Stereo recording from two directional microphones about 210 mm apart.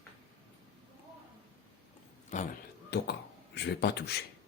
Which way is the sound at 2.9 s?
50° left (ahead or behind).